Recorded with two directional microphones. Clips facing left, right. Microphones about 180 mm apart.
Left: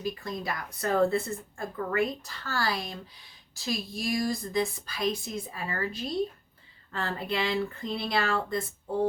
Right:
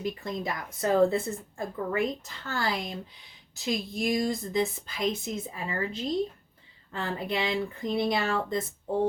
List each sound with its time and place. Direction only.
0.0 s speech: 20° right (ahead or behind)